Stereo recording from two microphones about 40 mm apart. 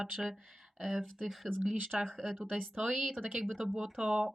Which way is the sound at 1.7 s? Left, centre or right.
Right.